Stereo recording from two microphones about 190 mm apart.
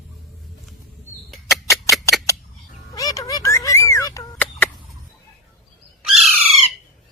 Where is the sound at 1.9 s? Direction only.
15° left (ahead or behind).